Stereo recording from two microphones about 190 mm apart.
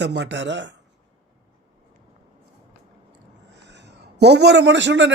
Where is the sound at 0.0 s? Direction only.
65° right (ahead or behind).